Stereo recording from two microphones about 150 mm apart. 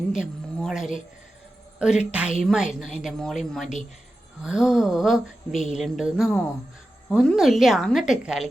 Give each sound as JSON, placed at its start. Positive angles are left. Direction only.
{"t": 0.1, "sound": "speech", "side_deg": -5}